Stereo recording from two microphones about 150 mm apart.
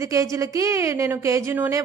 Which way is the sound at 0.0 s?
20° right (ahead or behind).